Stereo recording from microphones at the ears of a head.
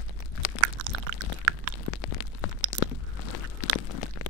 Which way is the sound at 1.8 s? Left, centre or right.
Left.